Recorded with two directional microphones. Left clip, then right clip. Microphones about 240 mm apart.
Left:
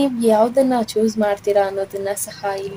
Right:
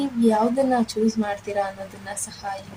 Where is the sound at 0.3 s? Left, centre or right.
Left.